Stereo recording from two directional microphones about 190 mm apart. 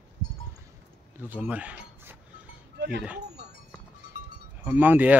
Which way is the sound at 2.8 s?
60° right (ahead or behind).